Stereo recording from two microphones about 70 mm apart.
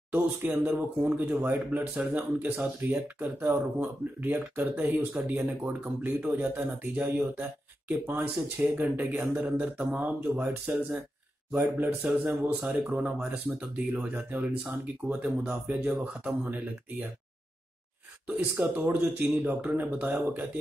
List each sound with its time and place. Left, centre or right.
0.1 s a man's voice: right
7.9 s a man's voice: right
12.4 s a man's voice: centre
18.2 s a man's voice: right